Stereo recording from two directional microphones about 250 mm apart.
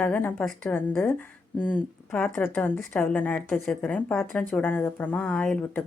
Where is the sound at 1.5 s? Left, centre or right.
Centre.